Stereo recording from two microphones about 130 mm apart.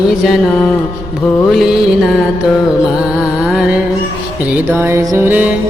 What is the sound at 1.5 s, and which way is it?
Music, centre (ahead or behind).